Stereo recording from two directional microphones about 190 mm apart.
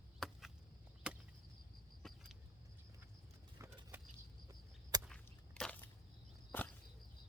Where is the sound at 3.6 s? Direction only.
15° right (ahead or behind).